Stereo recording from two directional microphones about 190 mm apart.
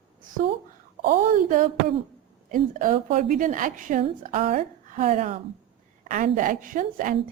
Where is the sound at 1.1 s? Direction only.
45° right (ahead or behind).